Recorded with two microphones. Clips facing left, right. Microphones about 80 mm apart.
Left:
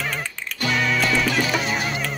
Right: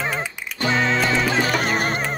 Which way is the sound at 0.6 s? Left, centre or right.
Right.